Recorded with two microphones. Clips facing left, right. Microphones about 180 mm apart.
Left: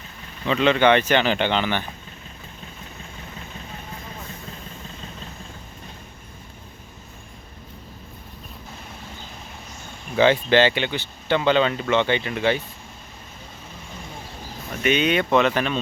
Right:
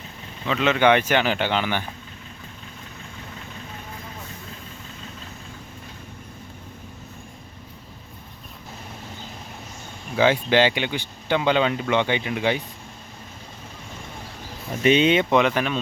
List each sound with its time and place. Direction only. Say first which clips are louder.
0.4 s speech: left 1 dB; 5° right (ahead or behind)
10.2 s speech: left 2 dB; 10° right (ahead or behind)
14.8 s speech: right 3 dB; 30° right (ahead or behind); by 15.8 s 10° right (ahead or behind)